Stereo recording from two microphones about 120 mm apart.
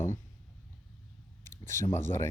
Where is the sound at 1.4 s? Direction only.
20° left (ahead or behind).